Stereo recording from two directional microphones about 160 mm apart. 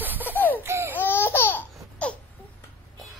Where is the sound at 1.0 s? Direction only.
15° left (ahead or behind).